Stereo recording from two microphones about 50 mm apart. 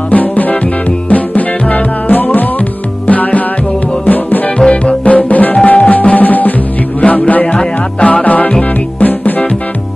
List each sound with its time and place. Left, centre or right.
0.1 s music: left
4.6 s music: left